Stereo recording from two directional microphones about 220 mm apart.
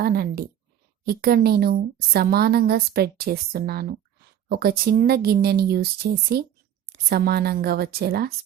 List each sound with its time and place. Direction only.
0.0 s a woman's voice: 45° right (ahead or behind)